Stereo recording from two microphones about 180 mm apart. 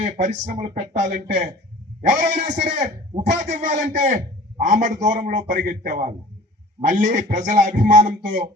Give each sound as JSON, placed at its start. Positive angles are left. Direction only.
{"t": 0.0, "sound": "a man's voice", "side_deg": -40}